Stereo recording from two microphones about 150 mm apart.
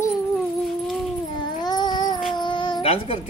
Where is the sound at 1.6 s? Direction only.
30° left (ahead or behind).